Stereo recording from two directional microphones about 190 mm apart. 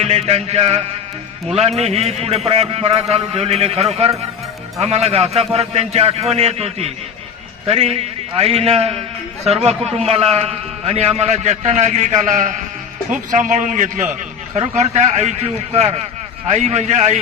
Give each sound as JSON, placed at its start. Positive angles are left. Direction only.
{"t": 0.0, "sound": "a man's voice", "side_deg": -35}